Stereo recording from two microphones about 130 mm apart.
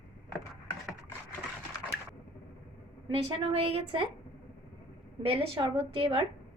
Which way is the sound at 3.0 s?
40° right (ahead or behind).